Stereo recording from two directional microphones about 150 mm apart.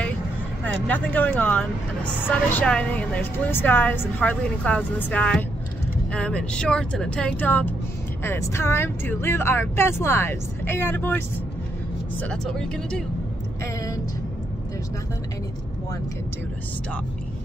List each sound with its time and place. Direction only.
0.8 s a woman's voice: 10° left (ahead or behind)